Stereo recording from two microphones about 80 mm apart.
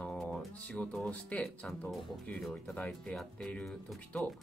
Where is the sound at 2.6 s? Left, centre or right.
Left.